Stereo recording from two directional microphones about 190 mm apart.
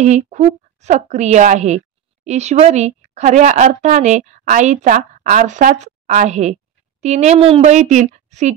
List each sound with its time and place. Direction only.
0.0 s a woman's voice: 35° right (ahead or behind)